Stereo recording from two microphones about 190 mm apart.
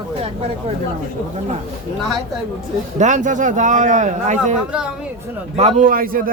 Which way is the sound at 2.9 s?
40° right (ahead or behind).